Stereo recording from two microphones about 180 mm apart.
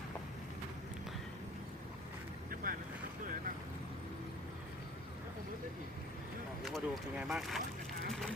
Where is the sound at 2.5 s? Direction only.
50° right (ahead or behind).